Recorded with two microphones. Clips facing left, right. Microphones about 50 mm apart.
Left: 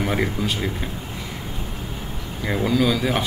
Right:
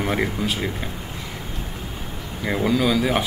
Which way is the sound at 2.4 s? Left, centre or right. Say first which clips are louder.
Even; centre.